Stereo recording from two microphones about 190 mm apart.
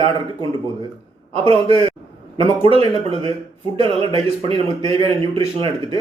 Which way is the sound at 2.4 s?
30° right (ahead or behind).